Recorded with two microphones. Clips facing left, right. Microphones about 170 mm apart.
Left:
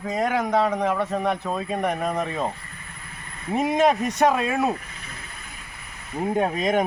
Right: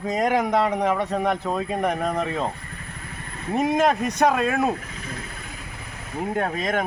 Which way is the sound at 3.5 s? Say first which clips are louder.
Even; centre (ahead or behind).